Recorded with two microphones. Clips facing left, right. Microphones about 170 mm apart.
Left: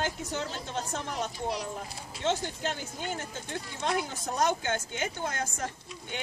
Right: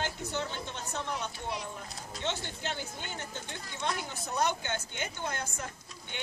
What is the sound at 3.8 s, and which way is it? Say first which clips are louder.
Speech: left 4 dB; 35° left (ahead or behind).